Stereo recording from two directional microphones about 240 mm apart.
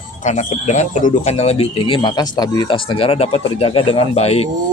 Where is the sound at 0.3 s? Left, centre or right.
Left.